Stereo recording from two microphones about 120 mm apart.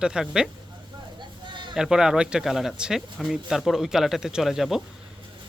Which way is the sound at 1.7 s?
5° right (ahead or behind).